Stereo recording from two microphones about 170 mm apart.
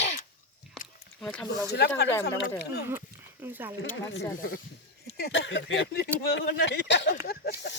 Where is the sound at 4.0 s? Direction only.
90° left.